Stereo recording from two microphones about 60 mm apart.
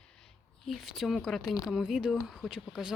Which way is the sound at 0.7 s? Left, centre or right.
Centre.